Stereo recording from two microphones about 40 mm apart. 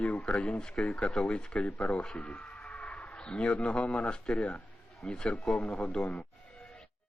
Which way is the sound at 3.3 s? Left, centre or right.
Left.